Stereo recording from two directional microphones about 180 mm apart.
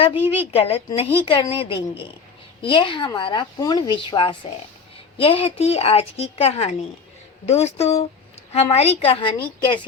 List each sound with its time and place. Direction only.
0.3 s a woman's voice: 35° left (ahead or behind)